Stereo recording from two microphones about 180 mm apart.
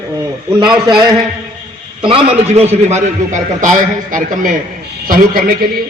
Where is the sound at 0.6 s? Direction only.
25° right (ahead or behind).